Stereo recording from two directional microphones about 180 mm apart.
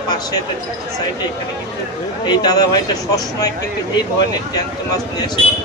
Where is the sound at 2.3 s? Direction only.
25° left (ahead or behind).